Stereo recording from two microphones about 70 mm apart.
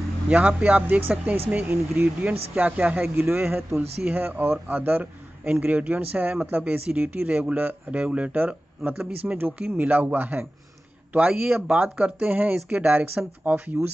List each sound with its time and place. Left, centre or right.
0.3 s speech: right
3.2 s speech: right